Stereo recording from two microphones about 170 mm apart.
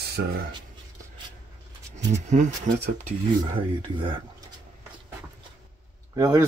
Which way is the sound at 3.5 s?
30° right (ahead or behind).